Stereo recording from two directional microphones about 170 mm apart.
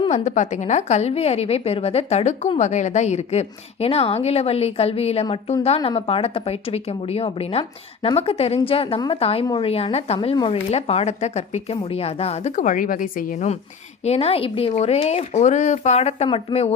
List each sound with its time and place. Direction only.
0.1 s a woman's voice: 45° left (ahead or behind)